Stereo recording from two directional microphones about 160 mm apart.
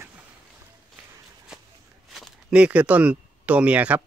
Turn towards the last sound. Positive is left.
turn(degrees=-10)  # may be behind; listen again after turning